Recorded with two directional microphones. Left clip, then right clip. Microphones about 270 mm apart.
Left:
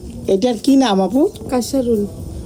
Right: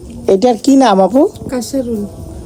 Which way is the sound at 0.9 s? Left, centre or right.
Right.